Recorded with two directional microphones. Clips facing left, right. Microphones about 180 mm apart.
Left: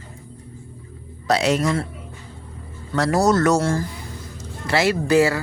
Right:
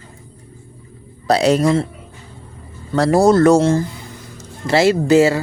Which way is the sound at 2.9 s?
30° right (ahead or behind).